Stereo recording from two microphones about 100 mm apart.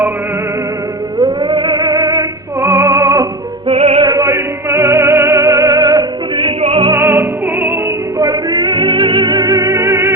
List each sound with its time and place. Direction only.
1.2 s music: 50° right (ahead or behind); by 3.2 s 30° right (ahead or behind)
3.7 s music: 85° right
4.0 s music: 35° right (ahead or behind)
6.6 s music: 80° right
6.9 s music: 25° right (ahead or behind)
8.2 s music: 40° right (ahead or behind)
8.5 s music: 55° right (ahead or behind); by 10.2 s 25° right (ahead or behind)